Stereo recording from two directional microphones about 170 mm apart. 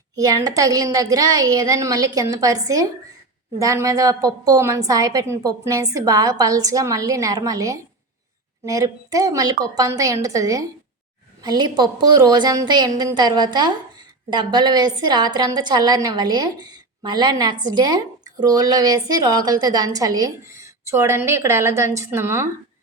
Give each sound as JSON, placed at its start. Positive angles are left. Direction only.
{"t": 0.2, "sound": "a woman's voice", "side_deg": -20}